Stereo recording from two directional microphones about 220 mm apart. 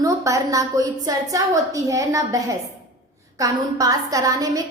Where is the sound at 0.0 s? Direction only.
15° right (ahead or behind).